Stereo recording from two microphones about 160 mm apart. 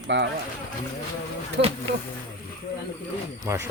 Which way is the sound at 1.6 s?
90° right.